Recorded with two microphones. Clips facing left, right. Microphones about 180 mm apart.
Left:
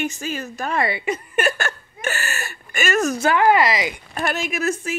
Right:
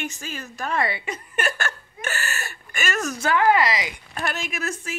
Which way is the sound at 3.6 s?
55° left (ahead or behind).